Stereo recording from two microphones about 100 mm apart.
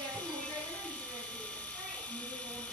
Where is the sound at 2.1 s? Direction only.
10° left (ahead or behind).